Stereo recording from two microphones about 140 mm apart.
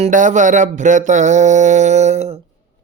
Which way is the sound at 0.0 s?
65° right (ahead or behind).